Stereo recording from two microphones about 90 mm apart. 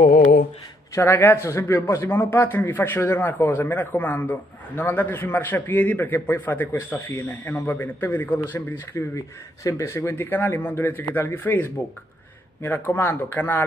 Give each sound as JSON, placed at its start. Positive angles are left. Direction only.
{"t": 0.9, "sound": "a man's voice", "side_deg": 20}
{"t": 9.1, "sound": "a man's voice", "side_deg": 35}